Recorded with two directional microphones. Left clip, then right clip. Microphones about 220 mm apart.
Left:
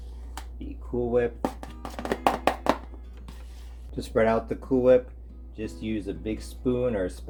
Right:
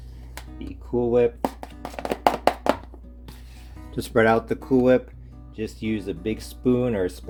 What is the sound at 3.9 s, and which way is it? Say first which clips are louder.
Speech: right 4 dB; 50° right (ahead or behind).